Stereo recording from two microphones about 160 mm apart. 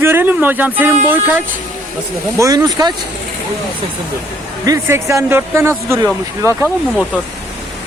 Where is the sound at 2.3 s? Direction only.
20° right (ahead or behind).